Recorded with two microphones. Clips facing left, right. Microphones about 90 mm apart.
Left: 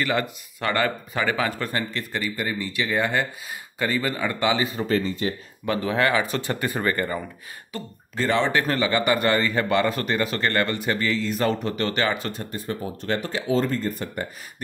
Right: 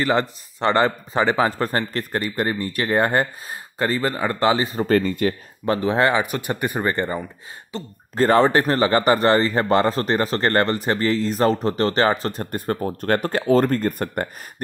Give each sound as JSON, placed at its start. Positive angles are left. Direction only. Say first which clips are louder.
{"t": 0.0, "sound": "a man's voice", "louder": "right 4 dB", "side_deg": -30}
{"t": 5.8, "sound": "speech", "louder": "right 3 dB", "side_deg": -25}
{"t": 8.2, "sound": "a man's voice", "louder": "right 6 dB", "side_deg": -40}